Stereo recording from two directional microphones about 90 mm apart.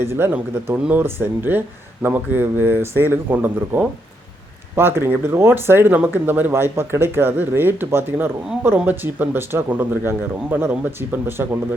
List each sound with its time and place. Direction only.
0.0 s speech: 25° right (ahead or behind)